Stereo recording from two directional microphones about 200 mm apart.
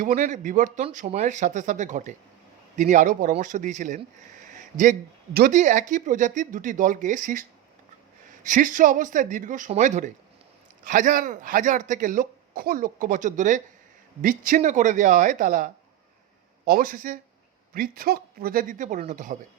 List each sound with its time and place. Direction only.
0.0 s speech: 40° right (ahead or behind)